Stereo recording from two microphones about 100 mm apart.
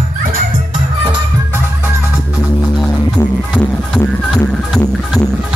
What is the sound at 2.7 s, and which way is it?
Music, 5° left (ahead or behind).